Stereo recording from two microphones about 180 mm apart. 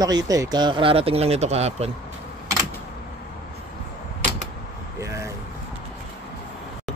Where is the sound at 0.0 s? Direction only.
20° right (ahead or behind); by 1.9 s 35° right (ahead or behind).